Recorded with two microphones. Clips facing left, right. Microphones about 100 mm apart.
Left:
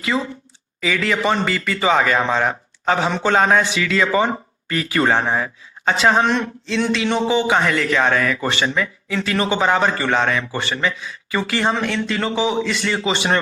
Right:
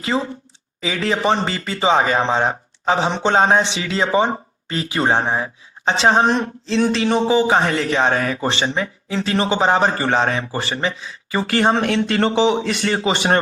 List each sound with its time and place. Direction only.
0.0 s a man's voice: 30° right (ahead or behind)
11.7 s speech: 65° right (ahead or behind); by 13.4 s 45° right (ahead or behind)